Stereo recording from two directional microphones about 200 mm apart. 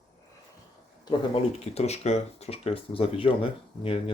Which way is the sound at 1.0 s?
30° left (ahead or behind).